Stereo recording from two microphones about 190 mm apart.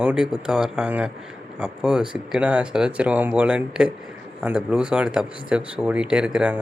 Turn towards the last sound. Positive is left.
turn(degrees=-5)  # may be behind; listen again after turning